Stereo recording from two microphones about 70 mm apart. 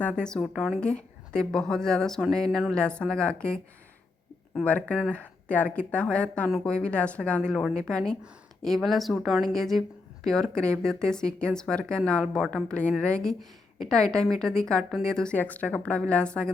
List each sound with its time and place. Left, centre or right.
0.0 s speech: centre
4.6 s a woman's voice: left
15.4 s a woman's voice: left